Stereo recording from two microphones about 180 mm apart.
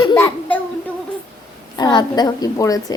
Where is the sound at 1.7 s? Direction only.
25° left (ahead or behind).